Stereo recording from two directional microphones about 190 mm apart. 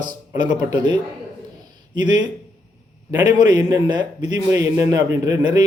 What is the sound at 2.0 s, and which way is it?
A man's voice, 20° right (ahead or behind).